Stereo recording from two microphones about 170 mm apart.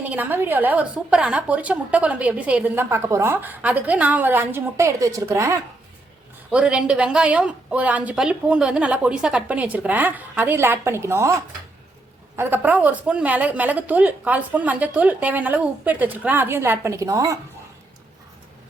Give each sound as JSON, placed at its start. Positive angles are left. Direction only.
{"t": 0.0, "sound": "a woman's voice", "side_deg": -10}
{"t": 6.5, "sound": "a woman's voice", "side_deg": -5}
{"t": 12.4, "sound": "a woman's voice", "side_deg": -10}